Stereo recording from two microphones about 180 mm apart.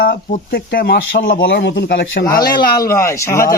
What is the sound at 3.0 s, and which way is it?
Speech, 15° left (ahead or behind).